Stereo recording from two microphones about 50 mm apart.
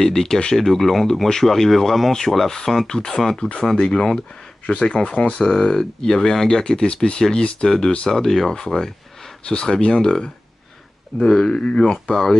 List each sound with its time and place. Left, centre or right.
0.0 s speech: centre
11.5 s speech: centre